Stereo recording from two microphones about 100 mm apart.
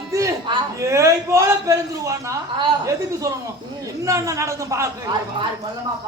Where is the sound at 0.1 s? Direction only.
30° right (ahead or behind).